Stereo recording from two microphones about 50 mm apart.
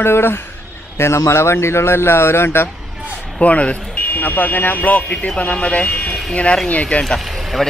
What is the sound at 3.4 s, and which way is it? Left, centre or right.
Speech, left.